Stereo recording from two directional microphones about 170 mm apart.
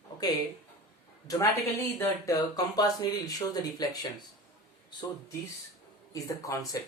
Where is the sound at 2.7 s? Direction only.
20° left (ahead or behind).